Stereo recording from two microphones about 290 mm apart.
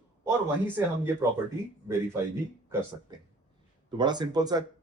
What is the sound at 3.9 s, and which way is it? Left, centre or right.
Speech, centre.